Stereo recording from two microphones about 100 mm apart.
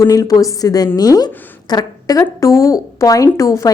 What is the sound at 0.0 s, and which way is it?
A woman's voice, 35° left (ahead or behind).